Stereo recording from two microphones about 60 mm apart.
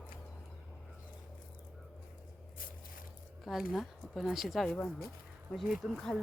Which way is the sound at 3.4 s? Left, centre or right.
Centre.